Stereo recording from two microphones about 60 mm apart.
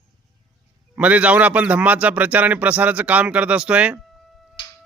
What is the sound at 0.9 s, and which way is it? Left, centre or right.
A man's voice, right.